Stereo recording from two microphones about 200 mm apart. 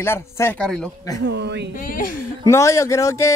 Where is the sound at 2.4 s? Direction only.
15° left (ahead or behind).